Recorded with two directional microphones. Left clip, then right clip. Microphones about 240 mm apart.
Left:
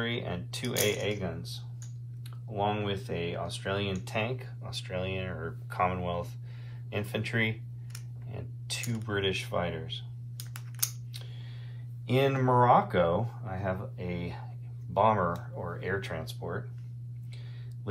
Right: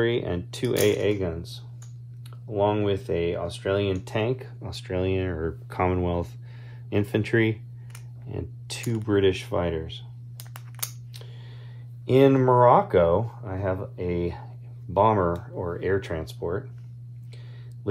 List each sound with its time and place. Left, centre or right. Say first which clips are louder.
0.0 s speech: right 9 dB; right
12.1 s speech: right 8 dB; right